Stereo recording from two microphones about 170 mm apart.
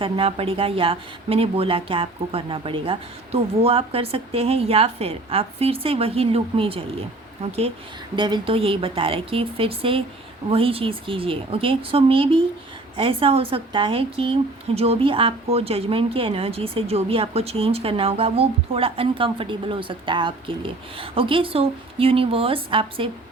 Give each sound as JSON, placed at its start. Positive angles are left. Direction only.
{"t": 0.0, "sound": "speech", "side_deg": -35}
{"t": 8.1, "sound": "speech", "side_deg": -25}